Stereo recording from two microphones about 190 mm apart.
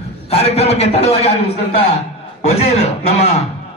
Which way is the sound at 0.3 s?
35° left (ahead or behind).